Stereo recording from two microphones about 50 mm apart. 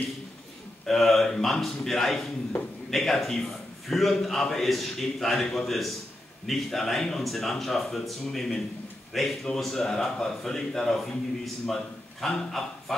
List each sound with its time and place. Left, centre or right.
0.8 s a man's voice: centre